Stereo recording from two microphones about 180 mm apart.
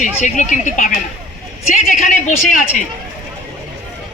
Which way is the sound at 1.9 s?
45° left (ahead or behind).